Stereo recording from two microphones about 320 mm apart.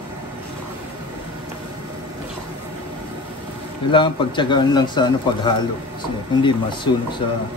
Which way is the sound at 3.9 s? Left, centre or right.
Centre.